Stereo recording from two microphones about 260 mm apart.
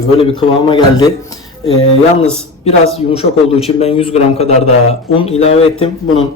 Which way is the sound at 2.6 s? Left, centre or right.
Left.